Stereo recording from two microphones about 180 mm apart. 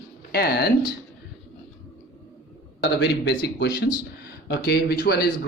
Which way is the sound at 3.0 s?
70° left (ahead or behind).